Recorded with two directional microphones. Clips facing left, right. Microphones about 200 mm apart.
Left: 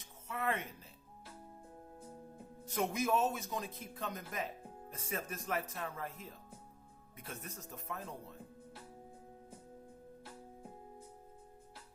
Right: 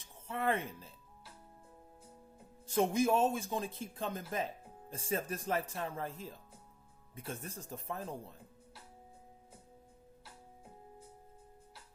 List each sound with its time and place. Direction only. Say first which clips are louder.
0.0 s speech: right 3 dB; 30° right (ahead or behind)
2.9 s speech: right 2 dB; 30° right (ahead or behind)